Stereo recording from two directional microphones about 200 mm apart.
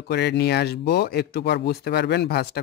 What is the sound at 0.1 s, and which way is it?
Speech, 55° left (ahead or behind).